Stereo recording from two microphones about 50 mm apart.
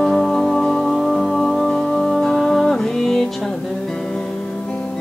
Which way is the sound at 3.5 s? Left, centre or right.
Centre.